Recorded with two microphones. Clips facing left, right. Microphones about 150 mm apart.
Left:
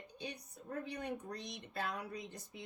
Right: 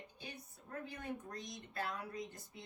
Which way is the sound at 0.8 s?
80° left.